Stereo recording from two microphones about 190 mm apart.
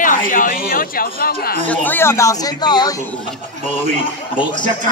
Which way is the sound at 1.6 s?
10° left (ahead or behind).